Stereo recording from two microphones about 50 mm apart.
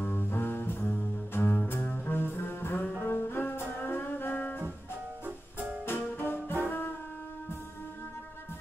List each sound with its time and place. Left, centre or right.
0.0 s music: left
4.4 s music: left
5.9 s music: left